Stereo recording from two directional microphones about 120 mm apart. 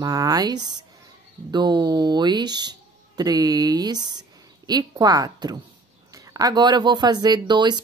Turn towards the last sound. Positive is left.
turn(degrees=-40)  # may be behind; listen again after turning